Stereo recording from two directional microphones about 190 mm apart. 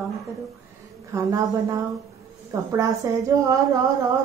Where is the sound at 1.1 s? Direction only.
15° right (ahead or behind).